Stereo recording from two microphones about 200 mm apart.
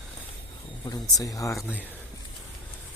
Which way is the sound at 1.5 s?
5° right (ahead or behind).